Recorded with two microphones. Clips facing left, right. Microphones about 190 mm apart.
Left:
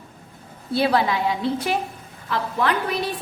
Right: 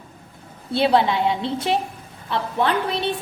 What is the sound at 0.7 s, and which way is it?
A woman's voice, 25° right (ahead or behind).